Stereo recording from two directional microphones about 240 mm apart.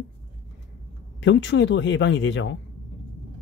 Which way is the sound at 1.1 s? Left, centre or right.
Left.